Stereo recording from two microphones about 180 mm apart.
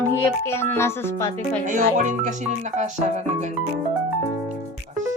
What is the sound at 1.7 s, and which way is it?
Speech, 45° right (ahead or behind).